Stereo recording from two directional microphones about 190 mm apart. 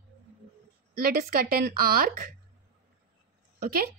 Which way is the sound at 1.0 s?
50° right (ahead or behind).